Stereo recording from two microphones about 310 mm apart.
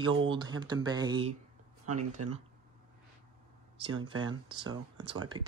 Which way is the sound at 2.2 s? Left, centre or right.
Right.